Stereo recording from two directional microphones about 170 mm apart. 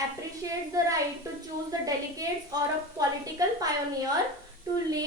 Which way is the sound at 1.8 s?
20° right (ahead or behind).